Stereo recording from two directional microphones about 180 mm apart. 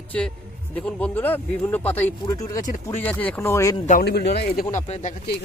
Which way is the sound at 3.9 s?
60° left (ahead or behind).